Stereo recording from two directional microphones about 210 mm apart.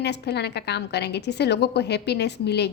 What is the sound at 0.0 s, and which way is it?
A woman's voice, 55° left (ahead or behind).